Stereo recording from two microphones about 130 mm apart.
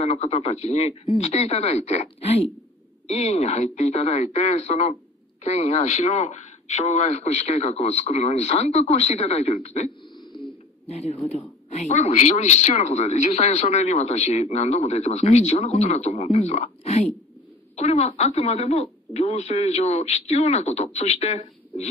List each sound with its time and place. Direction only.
0.0 s a man's voice: 55° left (ahead or behind)
10.9 s a man's voice: 55° left (ahead or behind)